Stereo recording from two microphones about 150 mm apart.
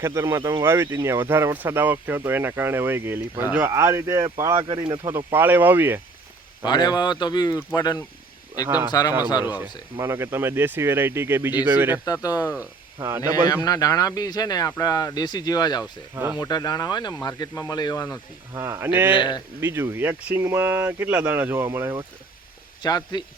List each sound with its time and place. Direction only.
0.0 s speech: 20° right (ahead or behind)
6.7 s speech: 30° left (ahead or behind)
8.6 s speech: 10° right (ahead or behind)
8.9 s speech: 25° left (ahead or behind)
9.5 s speech: 15° right (ahead or behind)
12.0 s speech: 25° left (ahead or behind)
13.0 s speech: 15° right (ahead or behind)
13.7 s speech: 25° left (ahead or behind)
16.1 s speech: 15° right (ahead or behind)
16.4 s speech: 25° left (ahead or behind)
18.5 s speech: 20° right (ahead or behind)
19.1 s speech: 30° left (ahead or behind)
19.5 s speech: 15° right (ahead or behind)
22.8 s speech: 25° left (ahead or behind)